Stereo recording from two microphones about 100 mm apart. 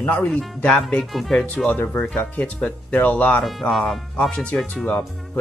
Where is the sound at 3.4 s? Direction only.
Centre (ahead or behind).